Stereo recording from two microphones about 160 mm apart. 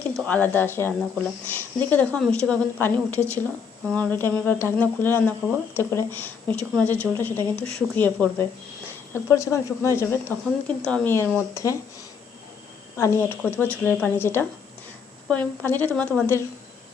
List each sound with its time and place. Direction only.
0.3 s speech: 10° left (ahead or behind)
13.0 s speech: 15° left (ahead or behind)